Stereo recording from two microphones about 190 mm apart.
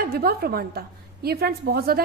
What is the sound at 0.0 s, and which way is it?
A woman's voice, 50° right (ahead or behind).